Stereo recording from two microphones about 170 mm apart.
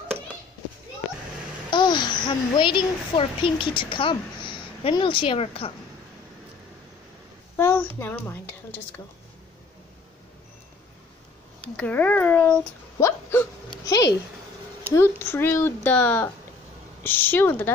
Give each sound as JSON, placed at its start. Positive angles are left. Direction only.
{"t": 1.7, "sound": "a child's voice", "side_deg": 25}
{"t": 7.5, "sound": "a sound", "side_deg": 15}
{"t": 8.0, "sound": "speech", "side_deg": 10}
{"t": 11.6, "sound": "speech", "side_deg": 10}
{"t": 14.9, "sound": "speech", "side_deg": 15}